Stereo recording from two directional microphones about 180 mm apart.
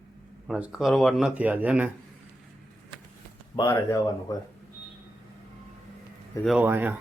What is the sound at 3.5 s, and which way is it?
Speech, 20° left (ahead or behind).